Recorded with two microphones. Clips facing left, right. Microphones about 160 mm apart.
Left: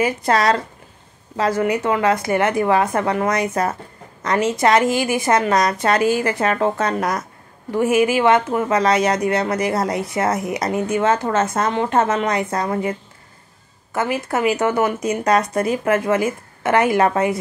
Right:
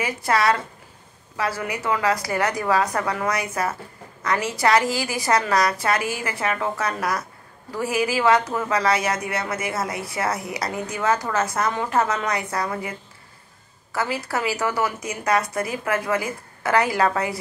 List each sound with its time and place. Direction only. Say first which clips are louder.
0.0 s a woman's voice: left 4 dB; 25° left (ahead or behind)
1.6 s a woman's voice: left 6 dB; 30° left (ahead or behind)
13.9 s a woman's voice: left 5 dB; 20° left (ahead or behind)